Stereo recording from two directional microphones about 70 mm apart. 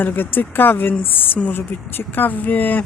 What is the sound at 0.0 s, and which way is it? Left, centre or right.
Speech, left.